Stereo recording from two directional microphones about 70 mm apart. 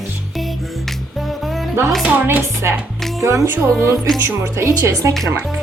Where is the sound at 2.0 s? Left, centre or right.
Right.